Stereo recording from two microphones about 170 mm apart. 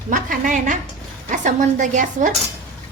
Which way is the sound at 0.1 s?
50° right (ahead or behind).